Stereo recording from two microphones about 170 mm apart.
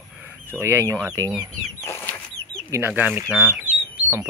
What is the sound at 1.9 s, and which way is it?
Bird flight, 10° left (ahead or behind).